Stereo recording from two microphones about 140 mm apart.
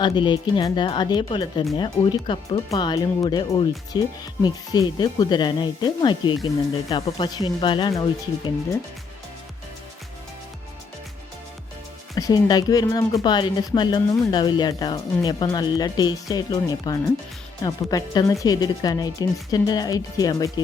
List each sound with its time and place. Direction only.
0.0 s speech: 35° left (ahead or behind)
12.1 s speech: 25° left (ahead or behind)